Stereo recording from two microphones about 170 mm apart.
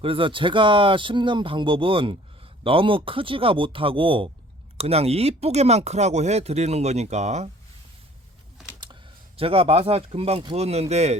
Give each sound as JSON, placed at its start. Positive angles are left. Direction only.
{"t": 0.0, "sound": "speech", "side_deg": -30}
{"t": 9.4, "sound": "speech", "side_deg": -35}